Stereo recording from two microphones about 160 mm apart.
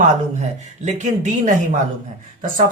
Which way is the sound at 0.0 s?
45° right (ahead or behind).